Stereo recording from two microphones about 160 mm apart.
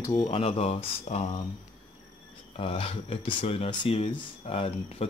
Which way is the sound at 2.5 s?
35° left (ahead or behind).